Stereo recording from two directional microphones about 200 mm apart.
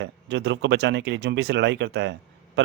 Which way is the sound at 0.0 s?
60° right (ahead or behind).